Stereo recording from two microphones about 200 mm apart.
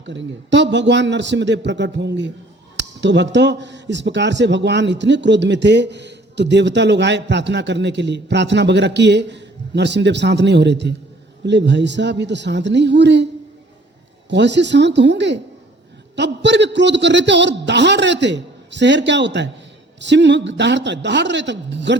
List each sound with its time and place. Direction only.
0.0 s speech: 65° right (ahead or behind)
14.3 s speech: 60° right (ahead or behind)